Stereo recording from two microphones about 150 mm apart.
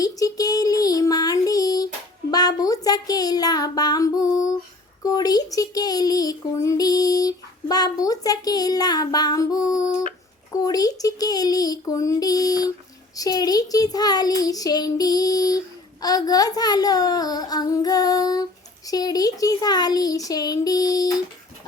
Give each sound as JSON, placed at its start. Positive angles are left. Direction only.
{"t": 0.0, "sound": "child singing", "side_deg": 25}
{"t": 2.3, "sound": "a child's voice", "side_deg": 25}